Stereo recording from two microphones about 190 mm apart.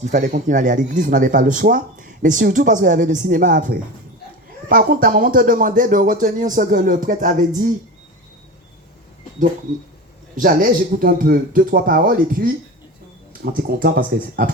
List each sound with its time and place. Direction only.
0.0 s speech: 40° right (ahead or behind)
10.3 s speech: 45° right (ahead or behind)